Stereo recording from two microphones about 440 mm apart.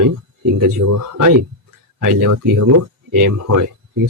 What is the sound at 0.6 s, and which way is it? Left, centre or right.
Speech, right.